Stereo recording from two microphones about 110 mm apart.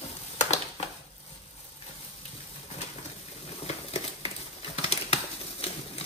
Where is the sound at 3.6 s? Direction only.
60° left (ahead or behind).